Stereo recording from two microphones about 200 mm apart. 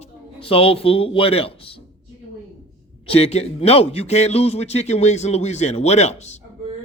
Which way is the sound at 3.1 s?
30° left (ahead or behind).